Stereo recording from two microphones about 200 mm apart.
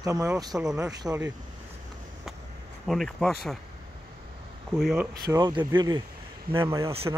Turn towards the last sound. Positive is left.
turn(degrees=-15)  # may be behind; listen again after turning